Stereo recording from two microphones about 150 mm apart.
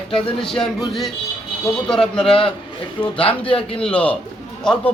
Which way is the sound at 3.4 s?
35° left (ahead or behind).